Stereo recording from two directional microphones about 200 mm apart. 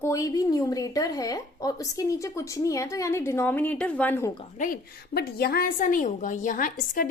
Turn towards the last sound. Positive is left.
turn(degrees=45)  # may be behind; listen again after turning